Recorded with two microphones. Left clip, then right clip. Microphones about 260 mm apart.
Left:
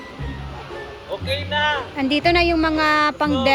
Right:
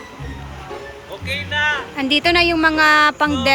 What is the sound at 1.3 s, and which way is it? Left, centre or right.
Speech, left.